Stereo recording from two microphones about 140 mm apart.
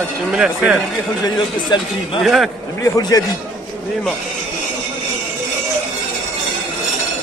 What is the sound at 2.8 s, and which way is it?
Speech, 25° left (ahead or behind).